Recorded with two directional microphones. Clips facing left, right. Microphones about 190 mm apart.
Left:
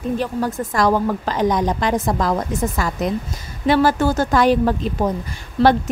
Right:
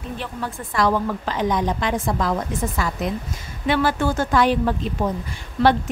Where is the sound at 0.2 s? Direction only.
40° left (ahead or behind).